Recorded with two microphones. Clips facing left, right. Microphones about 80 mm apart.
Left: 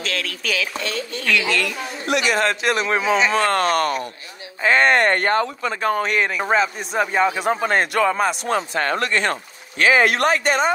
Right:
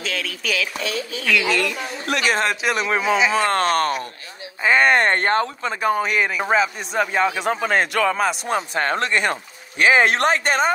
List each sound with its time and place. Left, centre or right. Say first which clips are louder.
0.0 s speech: left 1 dB; centre
2.0 s a man's voice: left 1 dB; right
2.6 s speech: left 1 dB; centre
4.6 s speech: even; centre
4.9 s speech: even; right
5.8 s speech: right 1 dB; centre
8.5 s speech: left 1 dB; centre
8.8 s speech: even; right
9.1 s speech: even; centre; by 10.7 s right